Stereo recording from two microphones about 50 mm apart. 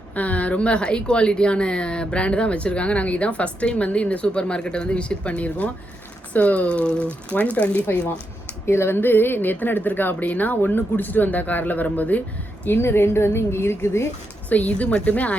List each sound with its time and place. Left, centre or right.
0.1 s speech: left
8.6 s speech: left
8.9 s a woman's voice: left
12.6 s speech: left
14.5 s a woman's voice: left